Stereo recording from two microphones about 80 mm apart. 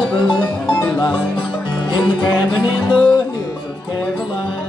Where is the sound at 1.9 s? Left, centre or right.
Left.